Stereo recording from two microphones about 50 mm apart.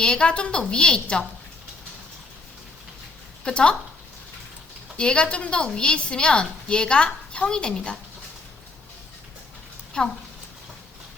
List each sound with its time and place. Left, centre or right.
0.0 s a woman's voice: centre
3.4 s a woman's voice: centre
4.9 s a woman's voice: centre
10.0 s a woman's voice: centre